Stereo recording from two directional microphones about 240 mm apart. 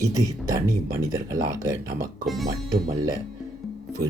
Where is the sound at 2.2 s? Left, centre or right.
Centre.